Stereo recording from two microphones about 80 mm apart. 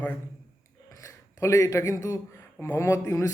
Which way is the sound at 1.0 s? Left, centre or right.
Left.